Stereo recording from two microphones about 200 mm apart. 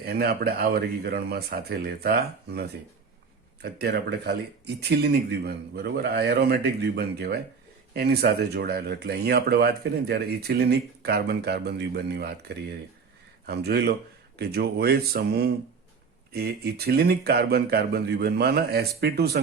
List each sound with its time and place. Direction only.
0.0 s speech: 50° right (ahead or behind)